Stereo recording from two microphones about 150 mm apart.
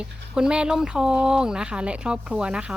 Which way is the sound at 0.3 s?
5° right (ahead or behind).